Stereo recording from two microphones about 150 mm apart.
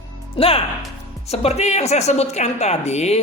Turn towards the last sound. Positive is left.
turn(degrees=45)  # may be behind; listen again after turning